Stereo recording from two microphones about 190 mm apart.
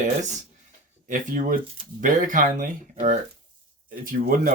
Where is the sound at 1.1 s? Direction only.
45° right (ahead or behind).